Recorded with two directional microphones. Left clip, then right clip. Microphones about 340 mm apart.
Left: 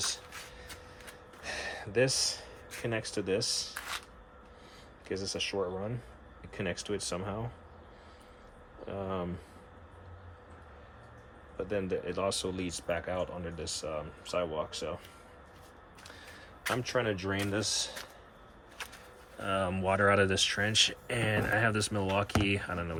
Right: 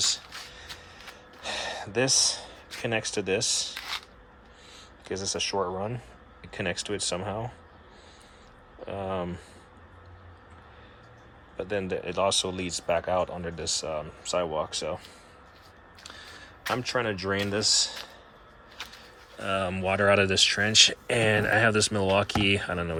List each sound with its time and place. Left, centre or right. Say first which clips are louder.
1.4 s a sound: right 6 dB; centre
5.0 s speech: right 4 dB; centre
8.9 s speech: right 5 dB; centre
11.5 s speech: right 3 dB; centre
16.0 s speech: right 6 dB; centre
19.4 s speech: right 4 dB; centre